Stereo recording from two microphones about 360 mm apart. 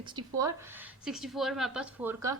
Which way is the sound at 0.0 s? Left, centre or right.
Centre.